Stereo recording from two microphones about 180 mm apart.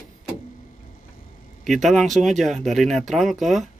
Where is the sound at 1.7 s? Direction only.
Centre (ahead or behind).